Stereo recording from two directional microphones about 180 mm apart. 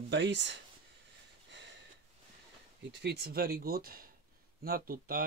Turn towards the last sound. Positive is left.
turn(degrees=-55)  # may be behind; listen again after turning